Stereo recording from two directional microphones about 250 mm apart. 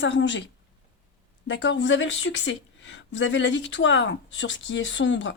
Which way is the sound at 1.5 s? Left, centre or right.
Left.